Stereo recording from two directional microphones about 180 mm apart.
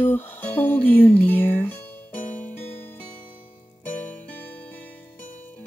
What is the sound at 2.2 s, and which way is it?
Music, 45° left (ahead or behind).